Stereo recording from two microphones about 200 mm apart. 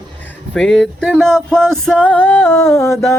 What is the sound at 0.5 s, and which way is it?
Music, 5° left (ahead or behind).